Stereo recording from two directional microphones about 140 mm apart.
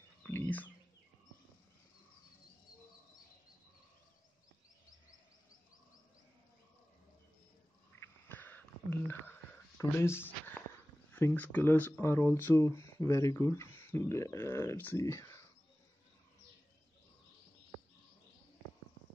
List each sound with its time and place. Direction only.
0.2 s bird: 15° left (ahead or behind)
8.3 s wheeze: 15° left (ahead or behind)
9.8 s speech: 20° left (ahead or behind)